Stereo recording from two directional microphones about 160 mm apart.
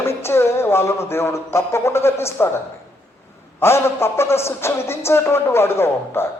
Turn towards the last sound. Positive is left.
turn(degrees=15)  # may be behind; listen again after turning